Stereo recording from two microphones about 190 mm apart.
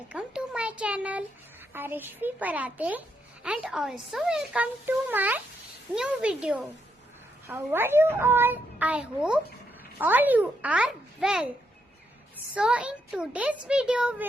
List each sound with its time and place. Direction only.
0.1 s a sound: 5° right (ahead or behind)
1.7 s a child's voice: 10° right (ahead or behind)
12.5 s speech: 5° right (ahead or behind)